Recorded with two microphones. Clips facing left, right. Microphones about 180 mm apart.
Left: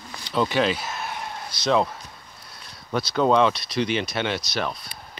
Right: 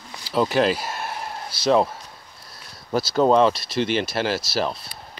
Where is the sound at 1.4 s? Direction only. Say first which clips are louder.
Right 3 dB; 30° right (ahead or behind).